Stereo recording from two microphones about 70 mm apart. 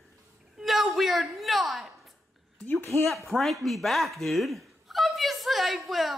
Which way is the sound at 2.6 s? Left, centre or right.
Left.